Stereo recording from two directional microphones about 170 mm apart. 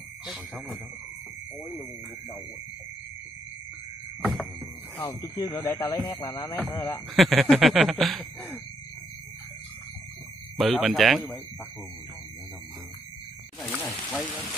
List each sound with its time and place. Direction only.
4.2 s a sound: centre (ahead or behind)
4.9 s speech: 20° left (ahead or behind)
7.2 s speech: centre (ahead or behind)
10.6 s speech: centre (ahead or behind)
13.6 s speech: 10° left (ahead or behind)